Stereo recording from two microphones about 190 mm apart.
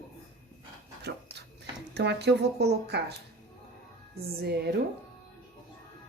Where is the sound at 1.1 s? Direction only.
60° right (ahead or behind).